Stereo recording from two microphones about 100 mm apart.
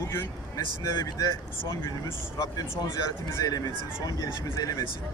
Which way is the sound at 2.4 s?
40° left (ahead or behind).